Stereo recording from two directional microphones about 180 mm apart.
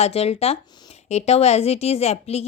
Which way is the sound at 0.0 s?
35° left (ahead or behind).